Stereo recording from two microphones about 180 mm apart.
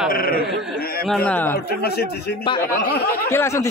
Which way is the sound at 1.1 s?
10° left (ahead or behind).